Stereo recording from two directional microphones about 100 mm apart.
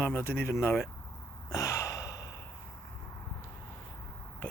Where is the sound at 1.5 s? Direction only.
30° left (ahead or behind).